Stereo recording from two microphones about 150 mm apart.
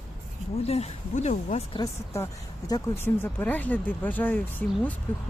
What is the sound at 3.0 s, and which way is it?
Speech, 15° left (ahead or behind).